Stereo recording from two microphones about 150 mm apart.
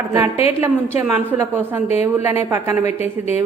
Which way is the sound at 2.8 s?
45° left (ahead or behind).